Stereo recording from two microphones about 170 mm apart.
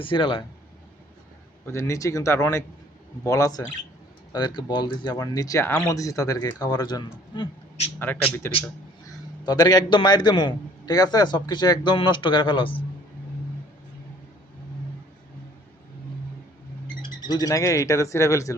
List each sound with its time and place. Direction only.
0.0 s a man's voice: 30° left (ahead or behind)
1.6 s a man's voice: 15° left (ahead or behind)
7.9 s speech: 10° left (ahead or behind)
9.0 s a man's voice: 25° left (ahead or behind)
17.0 s speech: 25° left (ahead or behind)